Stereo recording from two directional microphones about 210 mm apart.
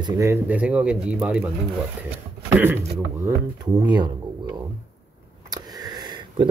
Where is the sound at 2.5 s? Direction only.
10° right (ahead or behind).